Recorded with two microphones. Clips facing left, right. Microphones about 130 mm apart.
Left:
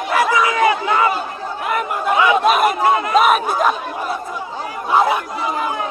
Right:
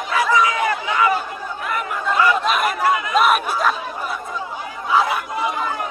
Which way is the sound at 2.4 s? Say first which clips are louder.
Left 5 dB; 45° left (ahead or behind).